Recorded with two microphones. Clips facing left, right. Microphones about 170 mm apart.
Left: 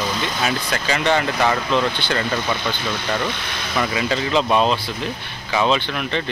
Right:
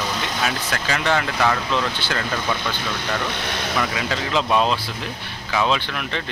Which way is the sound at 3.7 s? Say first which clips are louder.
Left 5 dB; 5° left (ahead or behind).